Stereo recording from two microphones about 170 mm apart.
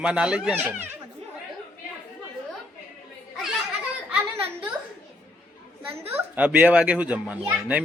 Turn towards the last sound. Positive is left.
turn(degrees=-10)  # may be behind; listen again after turning